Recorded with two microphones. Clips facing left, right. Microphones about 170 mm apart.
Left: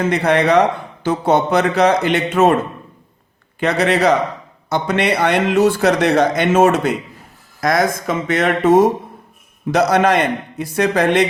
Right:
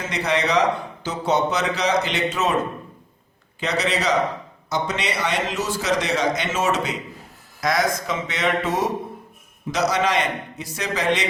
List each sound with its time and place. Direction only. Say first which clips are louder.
0.0 s speech: left 8 dB; 55° left (ahead or behind)
3.6 s speech: left 8 dB; 55° left (ahead or behind)